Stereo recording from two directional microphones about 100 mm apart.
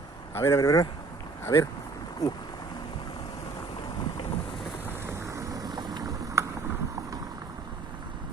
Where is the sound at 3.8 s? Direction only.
50° left (ahead or behind).